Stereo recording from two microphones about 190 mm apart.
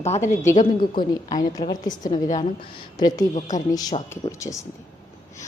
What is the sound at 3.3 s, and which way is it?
Speech, 40° left (ahead or behind).